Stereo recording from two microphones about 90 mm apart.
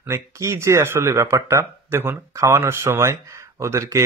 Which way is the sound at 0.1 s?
30° right (ahead or behind).